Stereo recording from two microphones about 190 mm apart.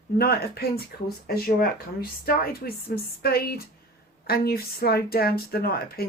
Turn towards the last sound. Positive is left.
turn(degrees=55)  # may be behind; listen again after turning